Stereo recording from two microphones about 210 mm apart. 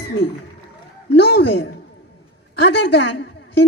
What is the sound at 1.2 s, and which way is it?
A woman's voice, 55° left (ahead or behind).